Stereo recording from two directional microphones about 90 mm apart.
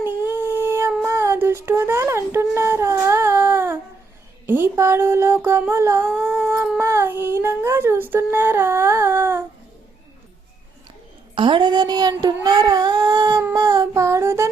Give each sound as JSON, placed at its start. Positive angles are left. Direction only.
{"t": 0.0, "sound": "dog", "side_deg": -25}
{"t": 1.0, "sound": "child singing", "side_deg": -30}
{"t": 4.4, "sound": "speech", "side_deg": -25}
{"t": 5.4, "sound": "music", "side_deg": -30}
{"t": 6.1, "sound": "humming", "side_deg": -20}
{"t": 11.3, "sound": "child singing", "side_deg": -65}
{"t": 13.5, "sound": "humming", "side_deg": -40}